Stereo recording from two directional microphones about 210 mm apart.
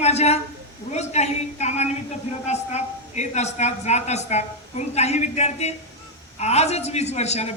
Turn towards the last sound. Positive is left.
turn(degrees=30)  # may be behind; listen again after turning